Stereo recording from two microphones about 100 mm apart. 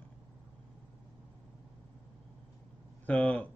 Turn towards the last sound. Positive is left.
turn(degrees=15)  # may be behind; listen again after turning